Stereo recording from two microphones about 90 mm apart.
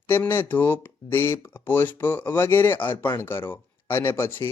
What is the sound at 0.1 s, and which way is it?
Speech, 25° left (ahead or behind).